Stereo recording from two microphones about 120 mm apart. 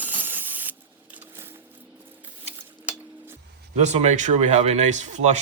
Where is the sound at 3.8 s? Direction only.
70° right (ahead or behind).